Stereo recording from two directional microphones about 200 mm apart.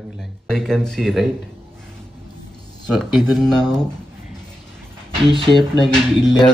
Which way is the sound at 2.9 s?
Centre (ahead or behind).